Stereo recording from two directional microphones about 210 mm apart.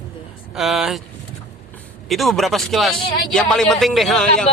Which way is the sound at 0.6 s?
Centre (ahead or behind).